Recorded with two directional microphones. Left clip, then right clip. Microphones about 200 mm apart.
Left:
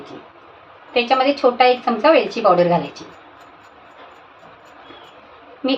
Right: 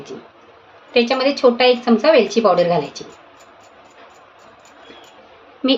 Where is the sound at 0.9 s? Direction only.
40° right (ahead or behind).